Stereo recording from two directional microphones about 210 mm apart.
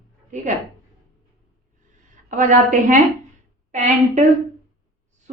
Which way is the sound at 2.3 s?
35° right (ahead or behind).